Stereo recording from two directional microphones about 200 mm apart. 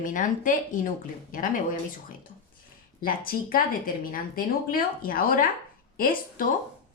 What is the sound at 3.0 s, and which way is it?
A woman's voice, 45° left (ahead or behind).